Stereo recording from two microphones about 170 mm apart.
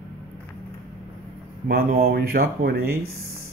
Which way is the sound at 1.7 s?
65° right (ahead or behind).